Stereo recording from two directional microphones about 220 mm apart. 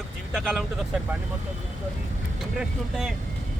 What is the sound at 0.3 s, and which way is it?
Speech, centre (ahead or behind).